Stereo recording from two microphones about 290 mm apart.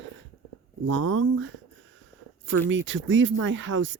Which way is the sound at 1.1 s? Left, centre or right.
Right.